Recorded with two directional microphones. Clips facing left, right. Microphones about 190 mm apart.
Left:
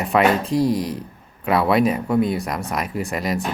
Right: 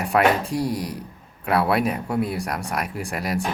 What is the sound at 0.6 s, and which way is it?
Speech, 30° left (ahead or behind).